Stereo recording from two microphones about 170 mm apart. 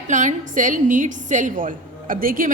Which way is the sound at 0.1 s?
45° right (ahead or behind).